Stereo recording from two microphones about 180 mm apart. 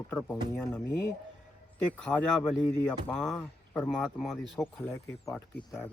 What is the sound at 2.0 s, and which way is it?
A man's voice, 5° left (ahead or behind).